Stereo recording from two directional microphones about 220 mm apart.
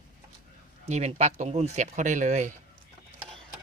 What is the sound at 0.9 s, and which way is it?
Speech, 30° right (ahead or behind).